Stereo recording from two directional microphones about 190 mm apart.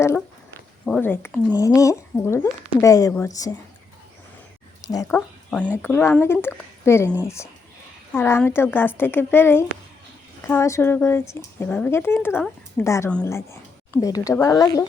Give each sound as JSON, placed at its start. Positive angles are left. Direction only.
{"t": 0.9, "sound": "speech", "side_deg": 5}
{"t": 4.9, "sound": "speech", "side_deg": 15}